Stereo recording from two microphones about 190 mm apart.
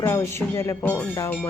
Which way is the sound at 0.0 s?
15° left (ahead or behind).